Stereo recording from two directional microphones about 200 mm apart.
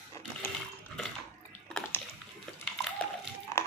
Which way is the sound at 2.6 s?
Centre (ahead or behind).